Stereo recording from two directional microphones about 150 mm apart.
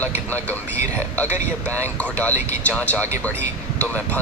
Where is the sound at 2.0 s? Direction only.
10° left (ahead or behind).